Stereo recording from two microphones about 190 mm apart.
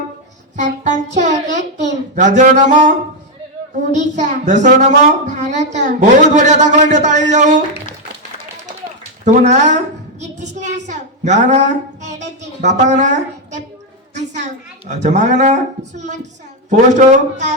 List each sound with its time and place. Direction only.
0.5 s a child's voice: 40° right (ahead or behind)
3.9 s a child's voice: 40° right (ahead or behind)
9.2 s a woman's voice: 40° right (ahead or behind)
14.2 s a woman's voice: 40° right (ahead or behind)